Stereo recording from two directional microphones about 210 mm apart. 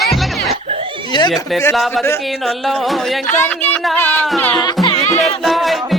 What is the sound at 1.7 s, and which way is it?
Speech, centre (ahead or behind).